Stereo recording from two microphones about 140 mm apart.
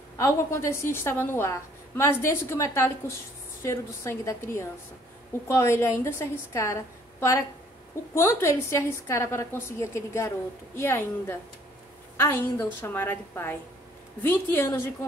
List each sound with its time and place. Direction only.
0.2 s a woman's voice: 20° left (ahead or behind)